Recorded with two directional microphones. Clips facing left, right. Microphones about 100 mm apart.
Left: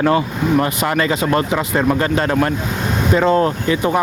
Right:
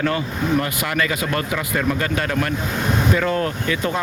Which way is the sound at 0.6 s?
30° left (ahead or behind).